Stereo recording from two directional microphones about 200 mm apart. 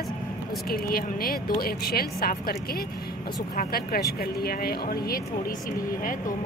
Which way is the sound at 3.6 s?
50° left (ahead or behind).